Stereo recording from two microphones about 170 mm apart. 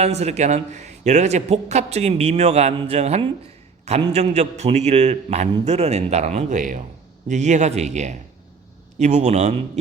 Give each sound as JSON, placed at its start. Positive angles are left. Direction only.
{"t": 0.0, "sound": "a man's voice", "side_deg": -40}